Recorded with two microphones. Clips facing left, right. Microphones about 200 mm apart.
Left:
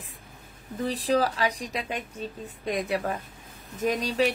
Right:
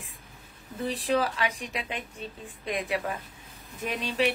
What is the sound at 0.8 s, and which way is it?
A woman's voice, 35° left (ahead or behind).